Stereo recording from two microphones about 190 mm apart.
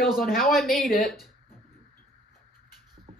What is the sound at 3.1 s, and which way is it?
Music, 35° right (ahead or behind).